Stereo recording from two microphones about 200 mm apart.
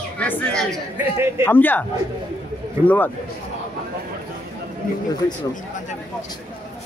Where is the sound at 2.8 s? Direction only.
10° left (ahead or behind).